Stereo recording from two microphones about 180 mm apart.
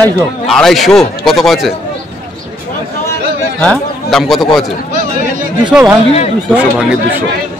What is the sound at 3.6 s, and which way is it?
Speech, 5° left (ahead or behind).